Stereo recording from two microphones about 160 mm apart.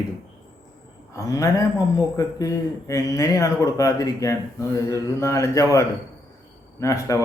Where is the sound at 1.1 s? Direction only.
20° left (ahead or behind).